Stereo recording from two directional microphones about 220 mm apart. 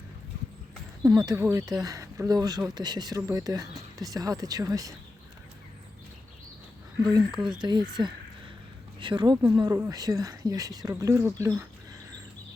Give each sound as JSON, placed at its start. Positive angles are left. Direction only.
{"t": 1.0, "sound": "speech", "side_deg": -15}
{"t": 7.3, "sound": "speech", "side_deg": -5}
{"t": 7.6, "sound": "speech", "side_deg": -20}